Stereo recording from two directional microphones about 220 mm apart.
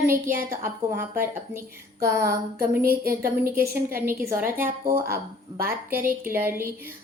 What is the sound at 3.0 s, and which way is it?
Speech, 40° right (ahead or behind).